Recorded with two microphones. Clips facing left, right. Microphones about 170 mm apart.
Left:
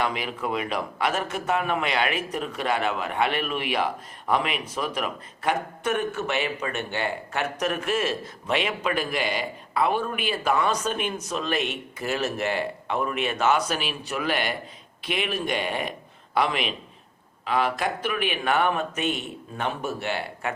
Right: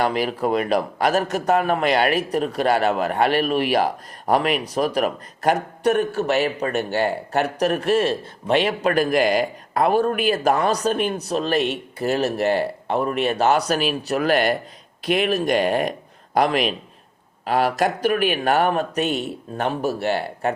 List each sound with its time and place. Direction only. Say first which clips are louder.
0.0 s a man's voice: right 7 dB; 40° right (ahead or behind)